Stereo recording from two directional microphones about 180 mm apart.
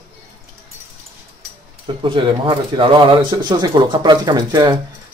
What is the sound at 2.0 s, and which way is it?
Speech, 30° right (ahead or behind).